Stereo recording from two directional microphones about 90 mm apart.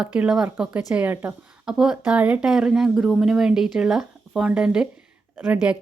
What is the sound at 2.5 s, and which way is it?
Speech, 5° right (ahead or behind).